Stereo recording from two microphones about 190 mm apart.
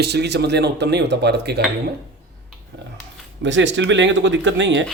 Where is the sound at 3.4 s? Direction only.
70° right (ahead or behind).